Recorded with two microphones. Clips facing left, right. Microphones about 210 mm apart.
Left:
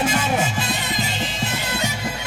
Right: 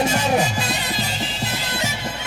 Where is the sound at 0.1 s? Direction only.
40° right (ahead or behind).